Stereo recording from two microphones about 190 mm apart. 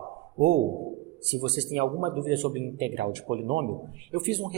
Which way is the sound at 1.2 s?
70° right (ahead or behind).